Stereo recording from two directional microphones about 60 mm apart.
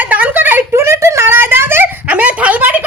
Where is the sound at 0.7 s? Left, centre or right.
Right.